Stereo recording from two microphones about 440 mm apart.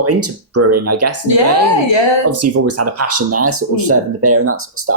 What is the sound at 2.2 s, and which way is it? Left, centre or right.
Speech, right.